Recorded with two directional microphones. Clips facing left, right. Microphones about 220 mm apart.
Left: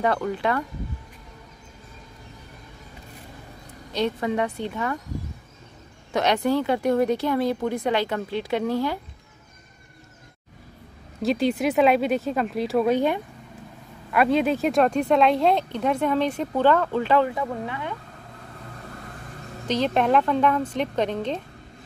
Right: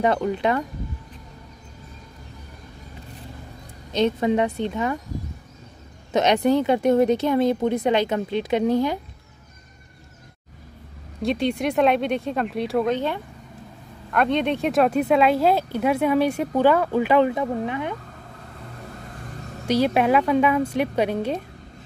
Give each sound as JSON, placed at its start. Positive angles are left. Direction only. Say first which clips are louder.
{"t": 0.0, "sound": "speech", "louder": "right 3 dB", "side_deg": -20}
{"t": 3.9, "sound": "speech", "louder": "right 4 dB", "side_deg": -20}
{"t": 6.1, "sound": "speech", "louder": "right 3 dB", "side_deg": -20}
{"t": 11.2, "sound": "speech", "louder": "left 1 dB", "side_deg": 0}
{"t": 19.7, "sound": "speech", "louder": "right 2 dB", "side_deg": -10}